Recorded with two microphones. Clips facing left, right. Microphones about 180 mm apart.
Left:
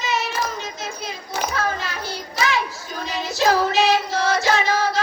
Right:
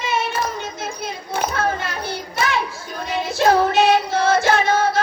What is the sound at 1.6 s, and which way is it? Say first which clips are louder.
Hands: right 3 dB; 55° right (ahead or behind).